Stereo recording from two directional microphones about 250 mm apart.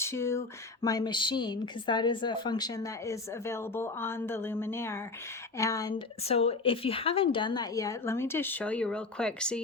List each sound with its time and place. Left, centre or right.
0.0 s speech: centre